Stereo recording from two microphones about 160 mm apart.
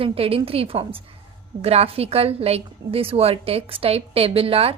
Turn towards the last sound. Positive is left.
turn(degrees=-35)  # may be behind; listen again after turning